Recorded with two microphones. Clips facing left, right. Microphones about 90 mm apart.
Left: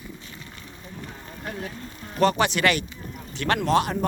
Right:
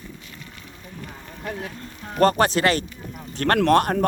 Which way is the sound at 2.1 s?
45° right (ahead or behind).